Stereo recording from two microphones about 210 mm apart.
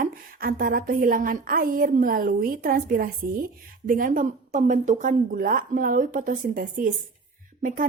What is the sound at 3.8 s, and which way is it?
Speech, 40° right (ahead or behind).